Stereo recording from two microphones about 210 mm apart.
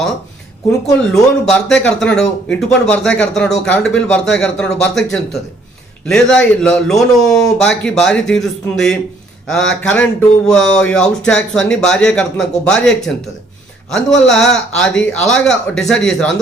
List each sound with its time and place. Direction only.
1.0 s speech: 5° left (ahead or behind)
6.1 s speech: 5° left (ahead or behind)